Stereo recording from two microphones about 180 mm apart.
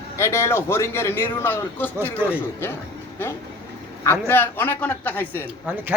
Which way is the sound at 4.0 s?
15° left (ahead or behind).